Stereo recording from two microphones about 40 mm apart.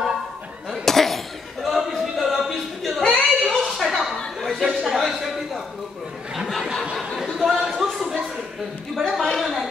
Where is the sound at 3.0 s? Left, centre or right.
Centre.